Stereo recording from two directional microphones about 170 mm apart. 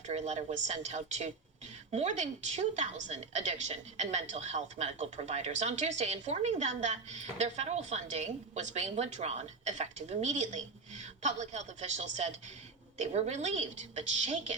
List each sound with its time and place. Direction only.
0.1 s a woman's voice: 45° right (ahead or behind)